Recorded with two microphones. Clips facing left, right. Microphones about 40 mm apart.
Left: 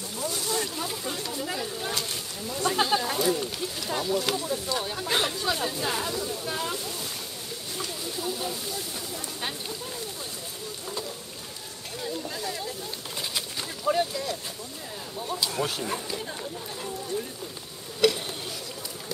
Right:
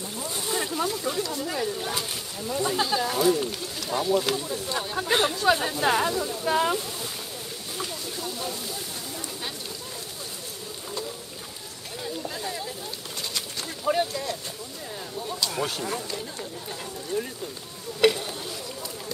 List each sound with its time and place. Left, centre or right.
0.3 s a sound: right
0.8 s speech: centre
2.7 s speech: centre
3.2 s speech: centre
4.0 s speech: centre
5.7 s speech: right
6.7 s speech: centre
7.7 s a sound: centre
12.0 s a sound: centre
13.8 s speech: centre
15.1 s speech: centre
18.0 s a sound: right